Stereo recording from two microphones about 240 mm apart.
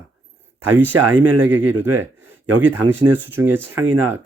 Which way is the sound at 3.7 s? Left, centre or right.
Right.